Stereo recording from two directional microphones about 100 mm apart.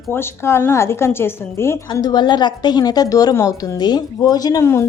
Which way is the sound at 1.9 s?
40° left (ahead or behind).